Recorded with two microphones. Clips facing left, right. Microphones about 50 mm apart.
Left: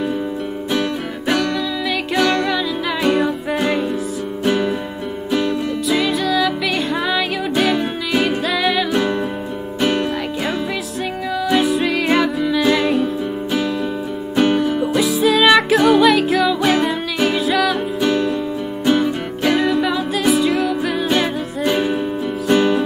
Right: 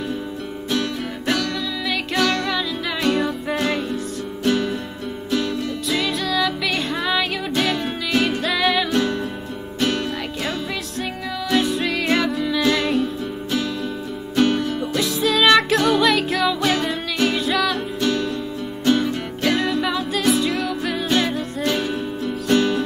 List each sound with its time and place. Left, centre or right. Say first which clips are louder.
0.7 s music: left 2 dB; centre
8.9 s music: left 3 dB; centre
11.4 s music: left 3 dB; centre
18.0 s music: left 4 dB; centre